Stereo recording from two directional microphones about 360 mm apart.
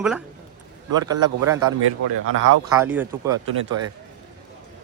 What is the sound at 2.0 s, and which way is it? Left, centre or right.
Speech, right.